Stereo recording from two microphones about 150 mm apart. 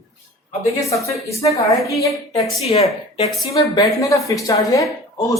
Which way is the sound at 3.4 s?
25° left (ahead or behind).